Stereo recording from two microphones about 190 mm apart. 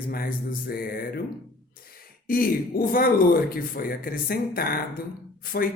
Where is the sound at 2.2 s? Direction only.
50° left (ahead or behind).